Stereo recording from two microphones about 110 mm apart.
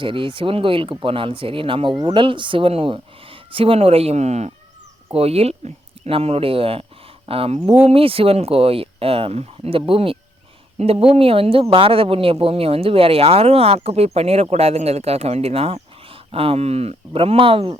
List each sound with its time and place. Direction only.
0.0 s speech: 50° right (ahead or behind)
2.0 s speech: 35° right (ahead or behind)
2.2 s speech: 50° right (ahead or behind); by 4.5 s 85° right
5.1 s speech: 65° right (ahead or behind)
17.1 s speech: 55° right (ahead or behind)